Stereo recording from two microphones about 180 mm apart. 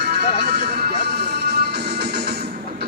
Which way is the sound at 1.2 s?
65° right (ahead or behind).